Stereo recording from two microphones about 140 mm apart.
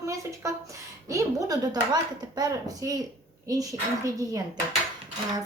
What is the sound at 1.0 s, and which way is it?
A woman's voice, 25° right (ahead or behind).